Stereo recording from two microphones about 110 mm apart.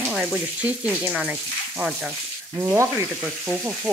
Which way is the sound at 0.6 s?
15° right (ahead or behind).